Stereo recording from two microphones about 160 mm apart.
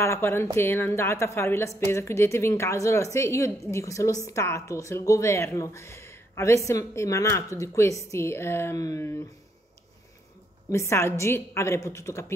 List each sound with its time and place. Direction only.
0.0 s a woman's voice: 15° left (ahead or behind)
10.7 s speech: 15° left (ahead or behind)